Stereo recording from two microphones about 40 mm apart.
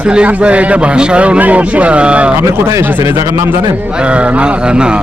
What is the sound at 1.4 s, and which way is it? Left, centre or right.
Speech, right.